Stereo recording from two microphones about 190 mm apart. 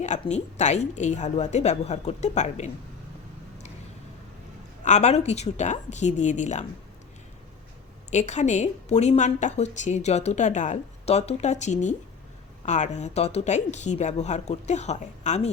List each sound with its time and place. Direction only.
0.0 s a woman's voice: 35° left (ahead or behind)
4.9 s a woman's voice: 35° left (ahead or behind)
8.1 s a woman's voice: 40° left (ahead or behind)